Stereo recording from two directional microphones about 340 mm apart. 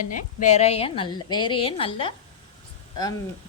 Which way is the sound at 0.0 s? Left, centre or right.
Left.